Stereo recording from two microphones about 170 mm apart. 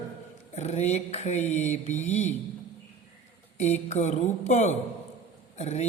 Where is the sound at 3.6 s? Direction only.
40° left (ahead or behind).